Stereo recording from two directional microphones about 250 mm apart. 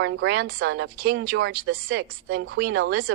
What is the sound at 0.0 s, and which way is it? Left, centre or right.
Speech, right.